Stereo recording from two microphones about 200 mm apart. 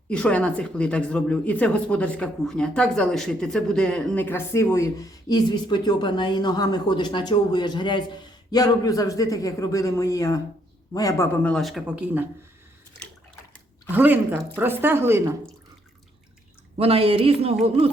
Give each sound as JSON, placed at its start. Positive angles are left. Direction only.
{"t": 0.1, "sound": "speech", "side_deg": 5}
{"t": 11.4, "sound": "speech", "side_deg": 0}
{"t": 13.9, "sound": "speech", "side_deg": -10}
{"t": 16.7, "sound": "speech", "side_deg": -30}